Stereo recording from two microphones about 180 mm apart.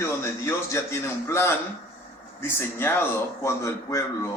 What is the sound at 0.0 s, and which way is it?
Speech, 15° left (ahead or behind).